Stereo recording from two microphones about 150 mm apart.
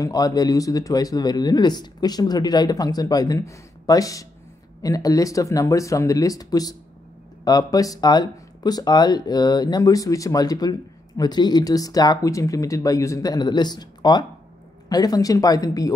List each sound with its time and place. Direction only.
0.0 s speech: 25° left (ahead or behind)